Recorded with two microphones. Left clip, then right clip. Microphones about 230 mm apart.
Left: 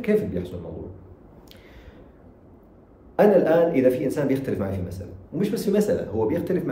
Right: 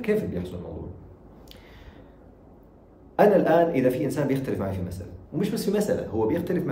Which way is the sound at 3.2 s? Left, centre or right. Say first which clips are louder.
Left 1 dB; centre.